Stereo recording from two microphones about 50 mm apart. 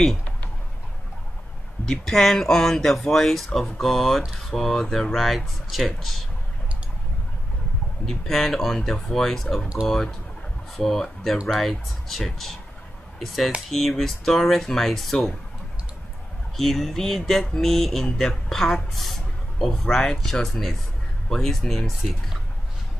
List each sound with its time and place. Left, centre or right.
1.9 s speech: centre
8.0 s speech: centre
9.8 s speech: centre
10.8 s speech: centre
16.5 s speech: centre